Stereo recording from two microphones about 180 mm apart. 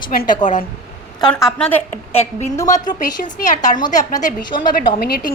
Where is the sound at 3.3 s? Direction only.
45° left (ahead or behind).